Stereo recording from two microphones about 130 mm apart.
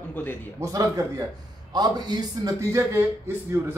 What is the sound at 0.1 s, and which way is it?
Speech, 15° left (ahead or behind).